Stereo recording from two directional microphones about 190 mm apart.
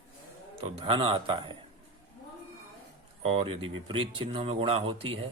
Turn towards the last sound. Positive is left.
turn(degrees=-30)  # may be behind; listen again after turning